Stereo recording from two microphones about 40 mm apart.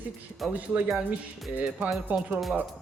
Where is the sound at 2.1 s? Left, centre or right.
Right.